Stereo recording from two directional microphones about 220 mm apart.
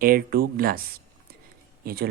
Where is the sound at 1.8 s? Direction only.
45° right (ahead or behind).